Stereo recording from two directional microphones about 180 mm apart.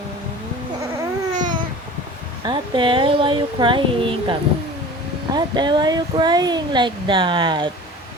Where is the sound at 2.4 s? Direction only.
25° right (ahead or behind).